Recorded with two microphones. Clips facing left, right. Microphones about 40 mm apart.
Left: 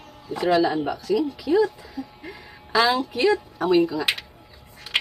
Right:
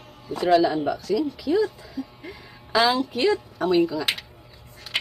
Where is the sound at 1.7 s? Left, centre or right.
Centre.